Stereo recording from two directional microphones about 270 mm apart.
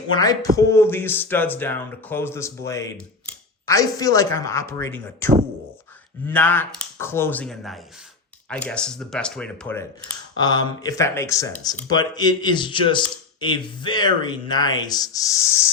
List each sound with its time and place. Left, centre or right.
0.1 s speech: centre